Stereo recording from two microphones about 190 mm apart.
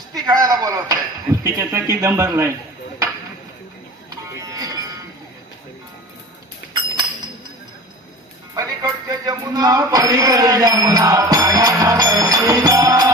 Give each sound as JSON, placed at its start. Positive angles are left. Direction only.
{"t": 0.3, "sound": "speech", "side_deg": -20}
{"t": 4.1, "sound": "music", "side_deg": -20}
{"t": 8.5, "sound": "music", "side_deg": -20}